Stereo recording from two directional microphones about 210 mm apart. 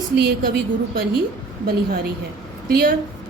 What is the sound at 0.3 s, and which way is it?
Speech, 50° right (ahead or behind).